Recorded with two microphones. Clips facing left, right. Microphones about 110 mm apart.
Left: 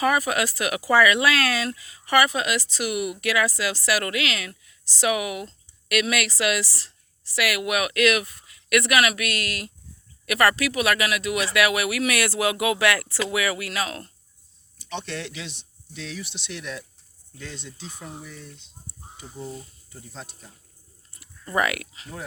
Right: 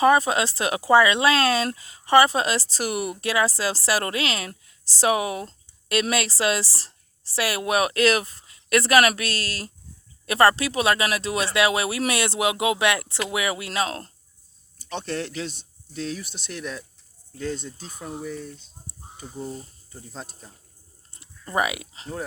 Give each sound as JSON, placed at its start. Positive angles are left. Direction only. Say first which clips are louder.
{"t": 0.0, "sound": "speech", "louder": "right 4 dB", "side_deg": -30}
{"t": 21.5, "sound": "speech", "louder": "even", "side_deg": -20}
{"t": 21.9, "sound": "speech", "louder": "right 5 dB", "side_deg": -30}